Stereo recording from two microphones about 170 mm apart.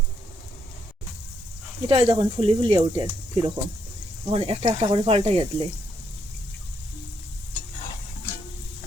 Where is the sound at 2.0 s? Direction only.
30° right (ahead or behind).